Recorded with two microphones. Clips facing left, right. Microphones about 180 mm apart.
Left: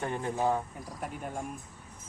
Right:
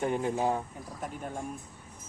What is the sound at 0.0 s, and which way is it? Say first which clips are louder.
Speech: right 2 dB; 15° right (ahead or behind).